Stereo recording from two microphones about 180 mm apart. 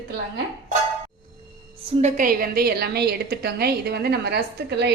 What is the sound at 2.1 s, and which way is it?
A woman's voice, 50° right (ahead or behind).